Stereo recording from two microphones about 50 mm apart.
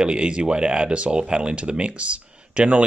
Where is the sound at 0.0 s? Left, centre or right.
Right.